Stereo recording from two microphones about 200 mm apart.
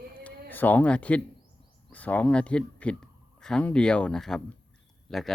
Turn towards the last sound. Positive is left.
turn(degrees=0)  # may be behind; listen again after turning